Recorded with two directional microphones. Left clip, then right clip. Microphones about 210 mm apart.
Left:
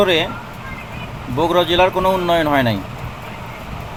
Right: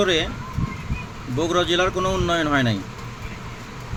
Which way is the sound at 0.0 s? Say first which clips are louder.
Left 5 dB; 15° right (ahead or behind).